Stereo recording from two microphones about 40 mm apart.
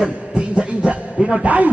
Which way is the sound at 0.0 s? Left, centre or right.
Right.